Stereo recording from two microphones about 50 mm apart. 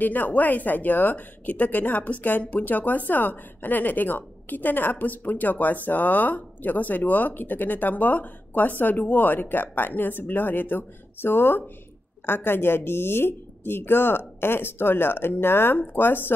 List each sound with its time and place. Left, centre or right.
0.0 s a woman's voice: left